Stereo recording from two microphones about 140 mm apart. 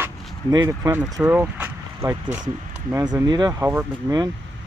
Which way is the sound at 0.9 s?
15° right (ahead or behind).